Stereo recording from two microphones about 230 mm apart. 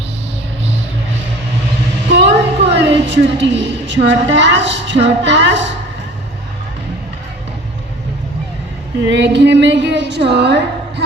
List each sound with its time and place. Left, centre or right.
2.1 s a woman's voice: right
9.0 s a woman's voice: right